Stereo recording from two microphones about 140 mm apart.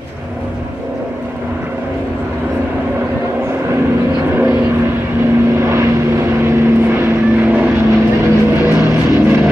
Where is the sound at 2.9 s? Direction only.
15° right (ahead or behind).